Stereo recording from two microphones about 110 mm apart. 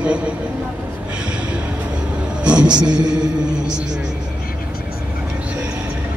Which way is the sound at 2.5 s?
10° right (ahead or behind).